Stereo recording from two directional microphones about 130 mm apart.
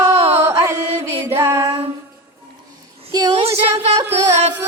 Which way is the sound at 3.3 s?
50° right (ahead or behind).